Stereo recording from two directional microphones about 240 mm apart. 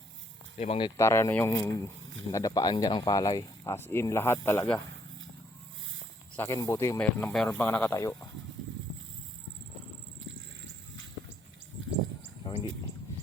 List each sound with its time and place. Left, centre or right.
0.6 s speech: left
0.9 s speech: centre
6.3 s speech: centre
12.4 s a sound: left